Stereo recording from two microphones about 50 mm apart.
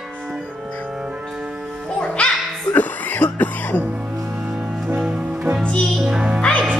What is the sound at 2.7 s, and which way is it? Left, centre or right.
Cough, left.